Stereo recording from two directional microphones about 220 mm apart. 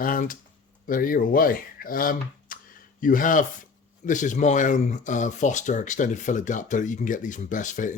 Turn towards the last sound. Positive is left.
turn(degrees=35)  # may be behind; listen again after turning